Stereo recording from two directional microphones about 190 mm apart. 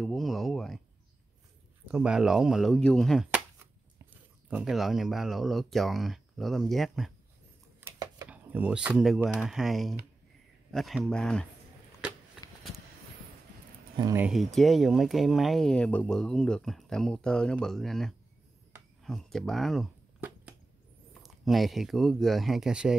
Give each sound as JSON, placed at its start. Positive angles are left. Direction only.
{"t": 0.0, "sound": "speech", "side_deg": 0}
{"t": 1.9, "sound": "speech", "side_deg": -5}
{"t": 4.5, "sound": "speech", "side_deg": -5}
{"t": 7.8, "sound": "a sound", "side_deg": -20}
{"t": 8.3, "sound": "speech", "side_deg": -10}
{"t": 14.1, "sound": "speech", "side_deg": -5}
{"t": 20.2, "sound": "a sound", "side_deg": -10}
{"t": 21.1, "sound": "speech", "side_deg": 0}